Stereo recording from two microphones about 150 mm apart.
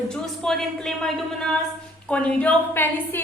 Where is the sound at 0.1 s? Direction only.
5° left (ahead or behind).